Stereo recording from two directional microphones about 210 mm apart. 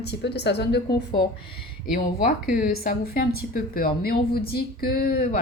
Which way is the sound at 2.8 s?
45° left (ahead or behind).